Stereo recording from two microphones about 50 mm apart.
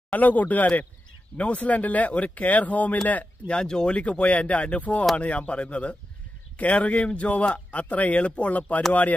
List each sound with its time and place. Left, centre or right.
0.1 s speech: left
3.5 s speech: centre
3.9 s a man's voice: left